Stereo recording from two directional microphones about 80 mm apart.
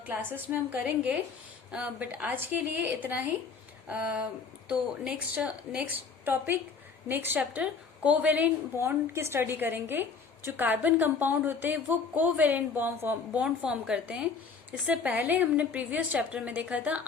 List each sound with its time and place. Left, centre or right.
0.0 s a woman's voice: right
8.8 s a woman's voice: right
13.4 s a woman's voice: centre
14.7 s a woman's voice: centre